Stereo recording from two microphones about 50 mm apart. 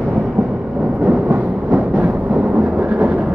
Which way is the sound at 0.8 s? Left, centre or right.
Centre.